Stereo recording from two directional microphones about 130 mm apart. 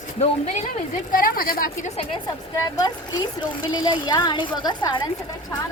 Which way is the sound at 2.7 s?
30° left (ahead or behind).